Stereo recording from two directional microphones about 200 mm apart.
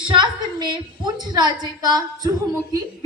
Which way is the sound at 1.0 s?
20° right (ahead or behind).